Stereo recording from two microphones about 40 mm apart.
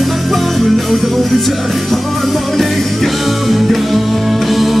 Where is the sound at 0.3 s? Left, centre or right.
Centre.